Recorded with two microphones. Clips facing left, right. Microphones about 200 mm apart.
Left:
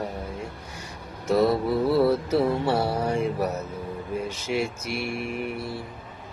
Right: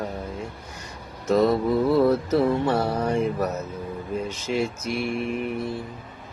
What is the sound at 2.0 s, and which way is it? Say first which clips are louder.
Speech: right 1 dB; 10° left (ahead or behind).